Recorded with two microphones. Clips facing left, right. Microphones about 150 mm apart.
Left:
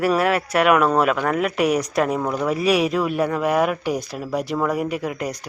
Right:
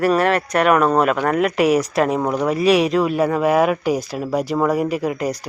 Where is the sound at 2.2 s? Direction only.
20° right (ahead or behind).